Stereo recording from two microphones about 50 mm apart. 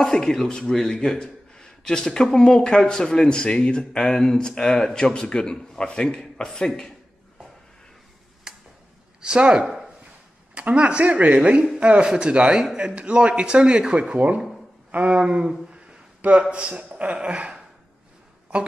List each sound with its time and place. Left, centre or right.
0.0 s speech: centre
8.5 s tick-tock: centre
9.2 s a man's voice: centre
16.2 s speech: right
16.4 s a man's voice: centre